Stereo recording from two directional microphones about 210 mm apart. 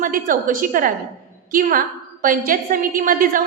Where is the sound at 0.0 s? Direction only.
40° right (ahead or behind).